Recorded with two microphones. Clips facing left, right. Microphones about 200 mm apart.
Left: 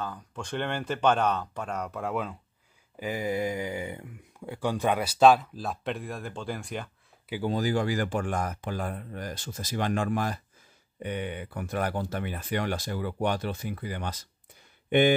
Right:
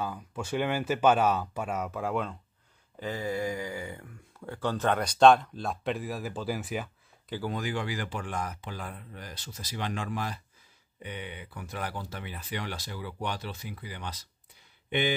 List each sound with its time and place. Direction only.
0.0 s speech: 10° right (ahead or behind)
3.0 s speech: 15° left (ahead or behind); by 6.9 s 5° right (ahead or behind)
7.4 s speech: 35° left (ahead or behind); by 15.1 s 50° left (ahead or behind)